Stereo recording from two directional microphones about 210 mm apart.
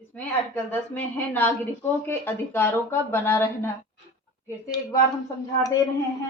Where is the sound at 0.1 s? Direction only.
5° left (ahead or behind).